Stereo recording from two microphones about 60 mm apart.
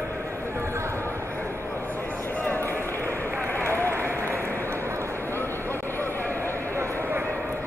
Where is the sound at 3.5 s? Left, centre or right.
Right.